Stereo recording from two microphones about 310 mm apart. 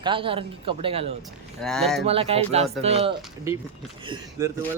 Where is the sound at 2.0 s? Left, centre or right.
Centre.